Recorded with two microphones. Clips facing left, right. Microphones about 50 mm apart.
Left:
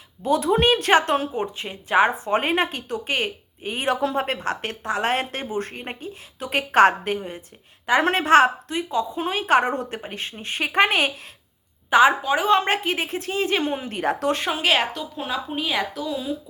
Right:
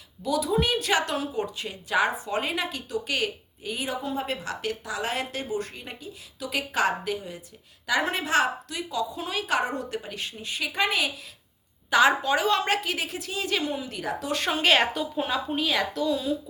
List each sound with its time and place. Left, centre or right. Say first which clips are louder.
0.2 s a woman's voice: left 5 dB; left
3.8 s a woman's voice: left 8 dB; left
11.9 s a woman's voice: left 4 dB; left
14.4 s a woman's voice: right 3 dB; centre
15.4 s speech: left 1 dB; centre